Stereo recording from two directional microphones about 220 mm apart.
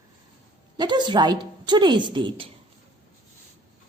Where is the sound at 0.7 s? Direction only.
20° right (ahead or behind).